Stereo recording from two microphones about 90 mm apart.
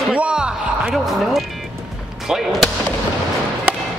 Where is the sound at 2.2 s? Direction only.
5° right (ahead or behind).